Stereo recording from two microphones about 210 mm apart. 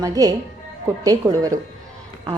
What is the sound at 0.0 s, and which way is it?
A woman's voice, 15° right (ahead or behind).